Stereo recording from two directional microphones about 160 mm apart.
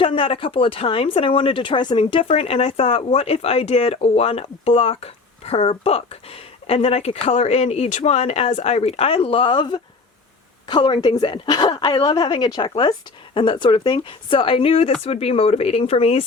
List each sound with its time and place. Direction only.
0.0 s a woman's voice: 35° left (ahead or behind)